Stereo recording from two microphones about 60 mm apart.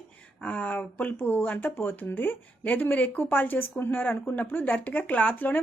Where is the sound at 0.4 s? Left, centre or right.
Left.